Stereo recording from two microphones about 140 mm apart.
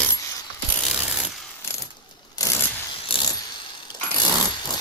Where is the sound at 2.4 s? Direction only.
25° left (ahead or behind).